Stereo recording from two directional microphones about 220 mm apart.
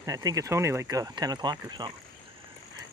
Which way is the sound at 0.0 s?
15° right (ahead or behind).